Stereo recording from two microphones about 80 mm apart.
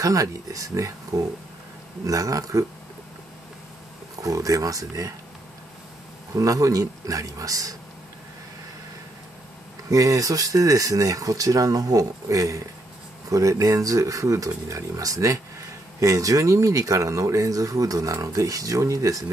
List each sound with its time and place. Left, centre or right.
0.0 s speech: right
4.2 s speech: right
6.3 s speech: right
9.8 s speech: right